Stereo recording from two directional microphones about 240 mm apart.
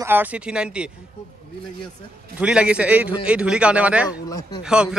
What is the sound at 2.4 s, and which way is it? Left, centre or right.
A man's voice, centre.